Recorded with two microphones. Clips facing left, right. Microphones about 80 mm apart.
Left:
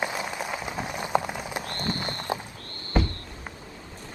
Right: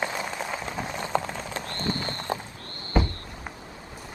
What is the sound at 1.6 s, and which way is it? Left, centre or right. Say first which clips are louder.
Run: right 1 dB; right.